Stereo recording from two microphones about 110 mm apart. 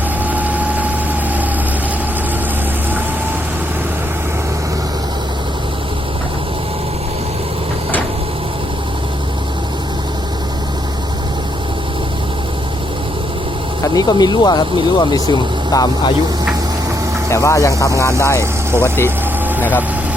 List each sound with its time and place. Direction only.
0.3 s vehicle: 15° right (ahead or behind)
13.8 s speech: 35° left (ahead or behind)
17.2 s speech: 25° left (ahead or behind)